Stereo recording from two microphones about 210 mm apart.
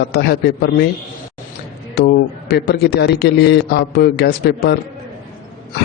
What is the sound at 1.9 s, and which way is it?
Speech, 50° left (ahead or behind).